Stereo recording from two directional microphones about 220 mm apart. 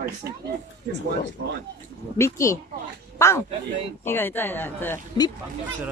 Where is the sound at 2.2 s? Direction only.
15° left (ahead or behind).